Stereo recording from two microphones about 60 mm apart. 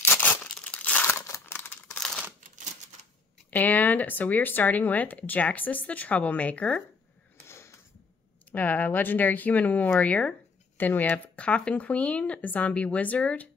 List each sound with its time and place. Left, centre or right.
0.2 s crumpling: left
1.0 s crumpling: left
1.4 s scissors: left
2.0 s crumpling: centre
3.4 s speech: left
7.4 s a sound: left
8.5 s speech: left